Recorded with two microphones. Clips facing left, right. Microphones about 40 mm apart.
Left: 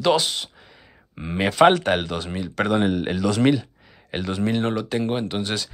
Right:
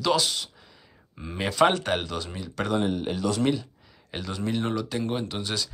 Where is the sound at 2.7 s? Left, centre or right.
Left.